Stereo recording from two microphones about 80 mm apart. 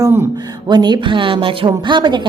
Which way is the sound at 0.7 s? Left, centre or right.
Right.